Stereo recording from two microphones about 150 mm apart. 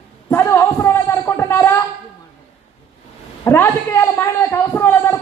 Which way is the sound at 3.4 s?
15° left (ahead or behind).